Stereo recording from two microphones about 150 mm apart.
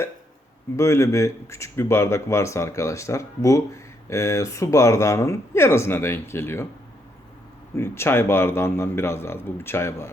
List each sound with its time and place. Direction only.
0.8 s speech: 20° left (ahead or behind)
7.8 s a man's voice: 15° left (ahead or behind)